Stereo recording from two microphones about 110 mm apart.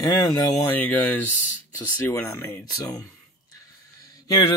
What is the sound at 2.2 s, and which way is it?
Speech, 30° left (ahead or behind).